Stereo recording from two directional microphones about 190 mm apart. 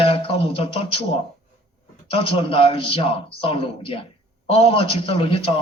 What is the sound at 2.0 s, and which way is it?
A man's voice, 30° left (ahead or behind).